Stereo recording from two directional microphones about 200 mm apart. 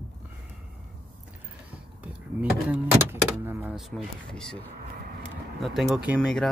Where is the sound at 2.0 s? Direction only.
5° right (ahead or behind).